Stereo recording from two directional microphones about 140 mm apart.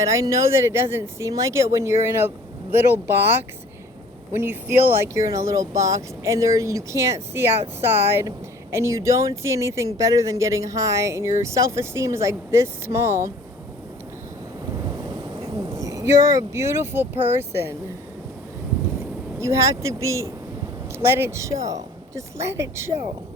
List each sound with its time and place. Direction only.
0.0 s speech: 20° right (ahead or behind)
15.4 s speech: 25° right (ahead or behind)
19.4 s speech: 20° right (ahead or behind)